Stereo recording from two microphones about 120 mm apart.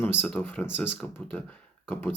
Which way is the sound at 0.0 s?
15° left (ahead or behind).